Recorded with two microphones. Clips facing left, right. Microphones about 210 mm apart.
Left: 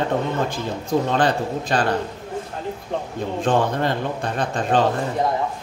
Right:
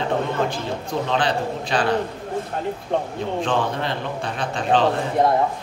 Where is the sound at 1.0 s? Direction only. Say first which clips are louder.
Left 2 dB; 45° left (ahead or behind).